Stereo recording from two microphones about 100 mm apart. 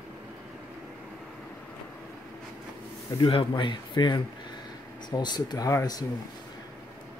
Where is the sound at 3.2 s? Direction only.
60° left (ahead or behind); by 6.0 s 35° left (ahead or behind).